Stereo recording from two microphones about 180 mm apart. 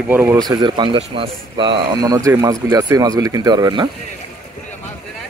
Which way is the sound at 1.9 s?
20° right (ahead or behind).